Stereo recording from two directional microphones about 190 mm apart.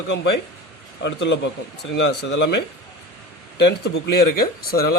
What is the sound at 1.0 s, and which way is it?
Speech, 65° left (ahead or behind).